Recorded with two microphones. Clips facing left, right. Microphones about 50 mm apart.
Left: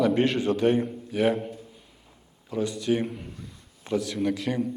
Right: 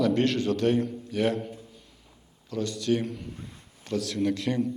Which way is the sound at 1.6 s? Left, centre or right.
Centre.